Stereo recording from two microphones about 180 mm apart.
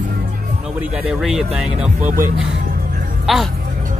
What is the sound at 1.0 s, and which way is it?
Speech, 5° right (ahead or behind).